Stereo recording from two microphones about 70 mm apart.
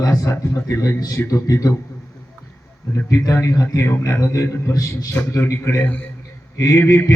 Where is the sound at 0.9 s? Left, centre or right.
Left.